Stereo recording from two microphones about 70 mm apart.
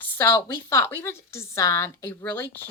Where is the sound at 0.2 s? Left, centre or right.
Left.